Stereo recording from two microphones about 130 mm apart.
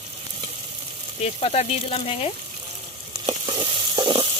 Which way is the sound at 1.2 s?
55° left (ahead or behind).